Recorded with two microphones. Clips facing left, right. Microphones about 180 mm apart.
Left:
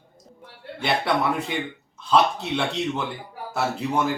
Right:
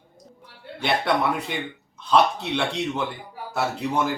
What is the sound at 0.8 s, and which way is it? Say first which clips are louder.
Speech: even; centre (ahead or behind).